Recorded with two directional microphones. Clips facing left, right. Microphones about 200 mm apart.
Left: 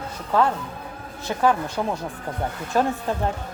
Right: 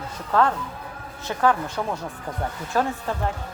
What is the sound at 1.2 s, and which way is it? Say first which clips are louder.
A woman's voice: left 1 dB; 15° left (ahead or behind).